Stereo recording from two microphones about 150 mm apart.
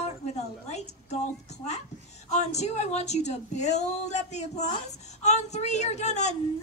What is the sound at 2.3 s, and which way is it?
A woman's voice, 50° left (ahead or behind).